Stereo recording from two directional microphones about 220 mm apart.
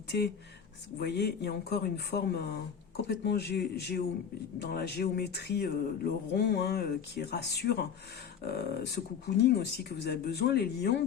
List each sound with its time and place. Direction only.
0.1 s speech: 45° left (ahead or behind)